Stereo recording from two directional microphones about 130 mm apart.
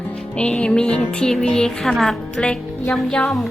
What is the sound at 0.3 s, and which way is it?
Music, 10° left (ahead or behind).